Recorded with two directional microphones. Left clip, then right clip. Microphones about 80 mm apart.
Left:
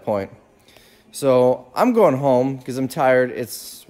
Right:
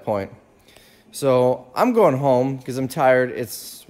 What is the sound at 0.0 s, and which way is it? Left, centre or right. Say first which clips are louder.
A man's voice: left 1 dB; left.